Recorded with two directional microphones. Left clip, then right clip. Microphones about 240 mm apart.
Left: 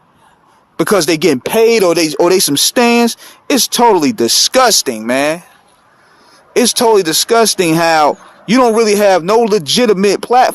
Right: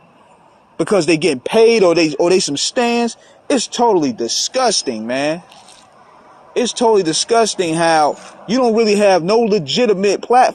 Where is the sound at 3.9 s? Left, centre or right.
Left.